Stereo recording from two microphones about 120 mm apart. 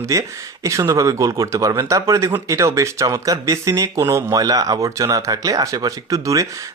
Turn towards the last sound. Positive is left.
turn(degrees=-25)  # may be behind; listen again after turning